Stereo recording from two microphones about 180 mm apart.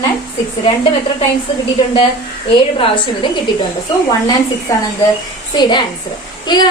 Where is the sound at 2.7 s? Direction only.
30° left (ahead or behind).